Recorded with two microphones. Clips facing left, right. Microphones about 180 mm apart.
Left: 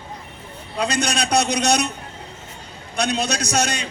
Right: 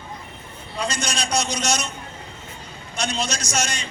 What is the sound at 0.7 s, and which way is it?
Speech, 60° left (ahead or behind).